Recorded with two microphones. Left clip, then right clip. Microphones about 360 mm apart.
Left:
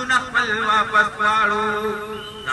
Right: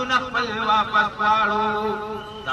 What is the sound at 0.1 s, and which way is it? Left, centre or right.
A man's voice, centre.